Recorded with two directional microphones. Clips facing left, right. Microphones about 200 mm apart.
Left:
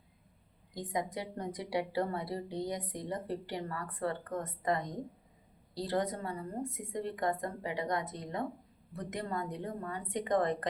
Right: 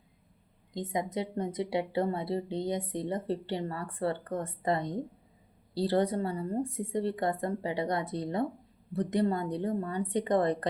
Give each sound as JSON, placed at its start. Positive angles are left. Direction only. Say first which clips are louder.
{"t": 0.7, "sound": "a woman's voice", "louder": "right 3 dB", "side_deg": -25}